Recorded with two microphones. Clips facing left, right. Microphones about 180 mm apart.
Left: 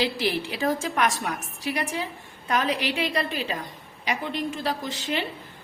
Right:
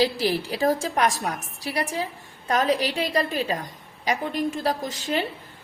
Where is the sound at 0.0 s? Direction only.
40° right (ahead or behind).